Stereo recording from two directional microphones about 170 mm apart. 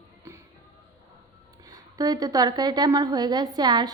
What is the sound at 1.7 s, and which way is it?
A woman's voice, 20° right (ahead or behind).